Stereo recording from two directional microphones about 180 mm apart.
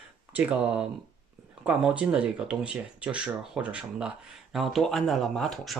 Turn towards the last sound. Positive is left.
turn(degrees=0)  # may be behind; listen again after turning